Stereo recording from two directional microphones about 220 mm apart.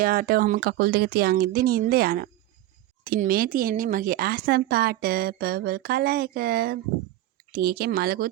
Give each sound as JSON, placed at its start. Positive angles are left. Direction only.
{"t": 0.0, "sound": "speech", "side_deg": -40}